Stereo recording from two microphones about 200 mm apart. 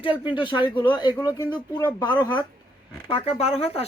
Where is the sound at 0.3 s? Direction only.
25° left (ahead or behind).